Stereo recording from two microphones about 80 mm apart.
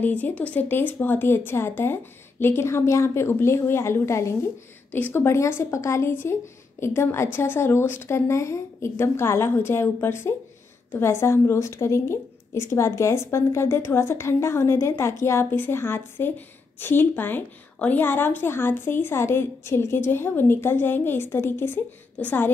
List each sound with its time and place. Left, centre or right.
0.0 s a woman's voice: centre; by 4.5 s left
4.9 s a woman's voice: left